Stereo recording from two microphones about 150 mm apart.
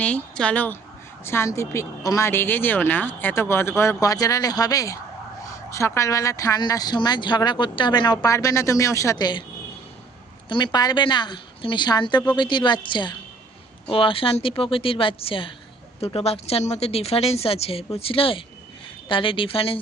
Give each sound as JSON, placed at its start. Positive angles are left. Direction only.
{"t": 0.0, "sound": "a woman's voice", "side_deg": 10}
{"t": 10.5, "sound": "a woman's voice", "side_deg": 30}